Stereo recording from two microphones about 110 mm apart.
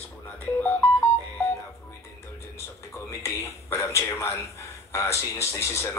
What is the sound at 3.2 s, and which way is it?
Speech, 25° left (ahead or behind).